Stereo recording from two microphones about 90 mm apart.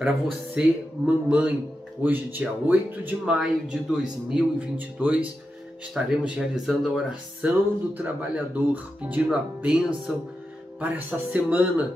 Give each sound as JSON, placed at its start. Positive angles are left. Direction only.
{"t": 0.6, "sound": "speech", "side_deg": -10}
{"t": 3.3, "sound": "speech", "side_deg": -5}
{"t": 9.6, "sound": "speech", "side_deg": -5}